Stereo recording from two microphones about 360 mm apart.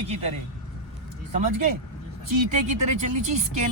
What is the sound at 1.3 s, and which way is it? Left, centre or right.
Speech, right.